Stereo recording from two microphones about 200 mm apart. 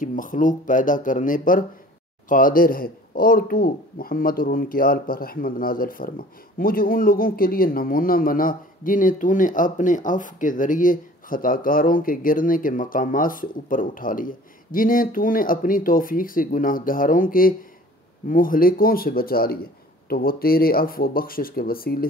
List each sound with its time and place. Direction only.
0.0 s speech: 40° left (ahead or behind)